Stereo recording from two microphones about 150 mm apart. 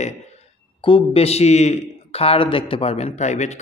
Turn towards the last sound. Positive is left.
turn(degrees=50)  # may be behind; listen again after turning